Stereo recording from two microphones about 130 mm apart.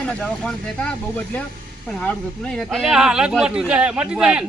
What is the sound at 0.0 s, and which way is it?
Speech, 10° left (ahead or behind).